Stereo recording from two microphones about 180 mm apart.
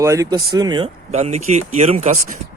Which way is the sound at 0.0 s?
15° right (ahead or behind).